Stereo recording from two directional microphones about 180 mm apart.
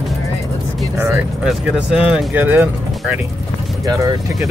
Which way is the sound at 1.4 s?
5° right (ahead or behind).